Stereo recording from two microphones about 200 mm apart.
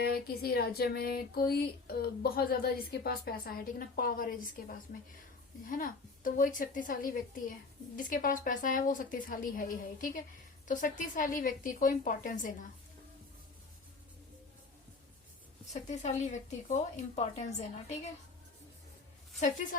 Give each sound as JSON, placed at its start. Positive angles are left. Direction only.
{"t": 0.0, "sound": "a sound", "side_deg": 50}
{"t": 10.7, "sound": "a woman's voice", "side_deg": 40}
{"t": 15.7, "sound": "a woman's voice", "side_deg": 35}
{"t": 19.4, "sound": "a woman's voice", "side_deg": 40}